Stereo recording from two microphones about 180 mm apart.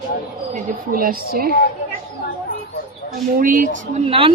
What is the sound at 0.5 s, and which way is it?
Speech, 55° right (ahead or behind).